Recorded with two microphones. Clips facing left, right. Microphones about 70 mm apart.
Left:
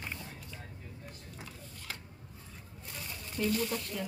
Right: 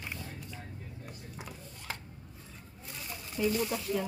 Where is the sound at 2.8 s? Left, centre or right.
Centre.